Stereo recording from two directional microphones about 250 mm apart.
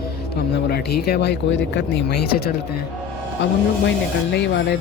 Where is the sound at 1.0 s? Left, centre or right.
Left.